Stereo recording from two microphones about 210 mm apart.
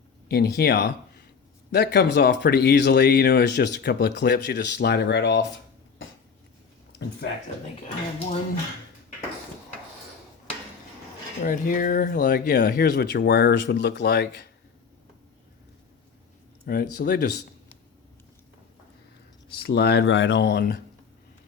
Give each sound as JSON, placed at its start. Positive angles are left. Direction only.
{"t": 0.3, "sound": "speech", "side_deg": 50}
{"t": 7.2, "sound": "speech", "side_deg": 50}
{"t": 11.4, "sound": "speech", "side_deg": 40}
{"t": 16.6, "sound": "speech", "side_deg": 45}
{"t": 19.6, "sound": "speech", "side_deg": 50}